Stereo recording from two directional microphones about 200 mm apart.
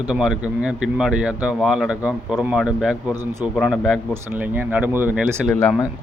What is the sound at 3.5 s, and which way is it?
Speech, 5° left (ahead or behind).